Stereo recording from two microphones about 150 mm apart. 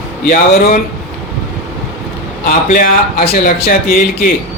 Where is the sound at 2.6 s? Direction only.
65° left (ahead or behind).